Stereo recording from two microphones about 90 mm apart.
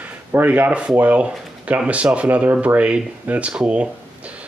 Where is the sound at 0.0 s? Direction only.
20° right (ahead or behind).